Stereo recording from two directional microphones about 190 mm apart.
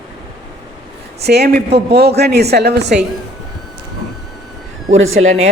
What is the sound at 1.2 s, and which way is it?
A man's voice, 60° right (ahead or behind).